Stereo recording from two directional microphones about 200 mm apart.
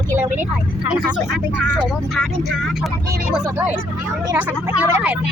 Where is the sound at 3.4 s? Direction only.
10° right (ahead or behind).